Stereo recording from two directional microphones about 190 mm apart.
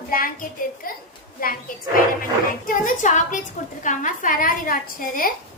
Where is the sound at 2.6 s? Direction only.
45° left (ahead or behind).